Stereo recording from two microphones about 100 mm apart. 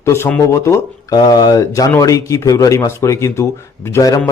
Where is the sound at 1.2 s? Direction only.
40° left (ahead or behind).